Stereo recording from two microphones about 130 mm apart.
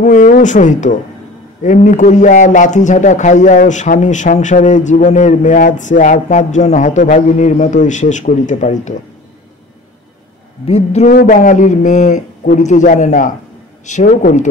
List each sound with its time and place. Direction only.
0.0 s a man's voice: 85° left
10.7 s a man's voice: 55° left (ahead or behind)
11.1 s a man's voice: 85° left